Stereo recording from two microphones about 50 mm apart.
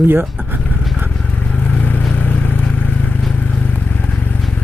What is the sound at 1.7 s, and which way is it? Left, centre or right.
Vehicle, left.